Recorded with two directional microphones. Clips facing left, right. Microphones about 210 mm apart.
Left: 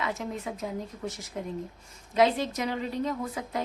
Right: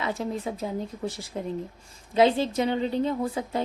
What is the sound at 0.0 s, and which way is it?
A woman's voice, 30° right (ahead or behind).